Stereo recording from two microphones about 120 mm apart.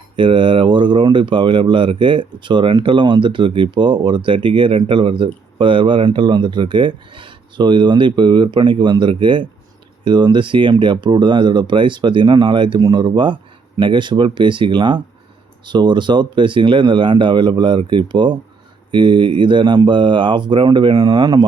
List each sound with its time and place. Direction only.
0.2 s speech: 45° right (ahead or behind)